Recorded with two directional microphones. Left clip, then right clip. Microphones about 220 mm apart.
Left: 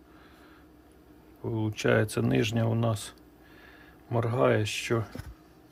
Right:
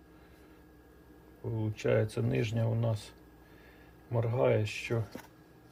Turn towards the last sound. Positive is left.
turn(degrees=35)  # may be behind; listen again after turning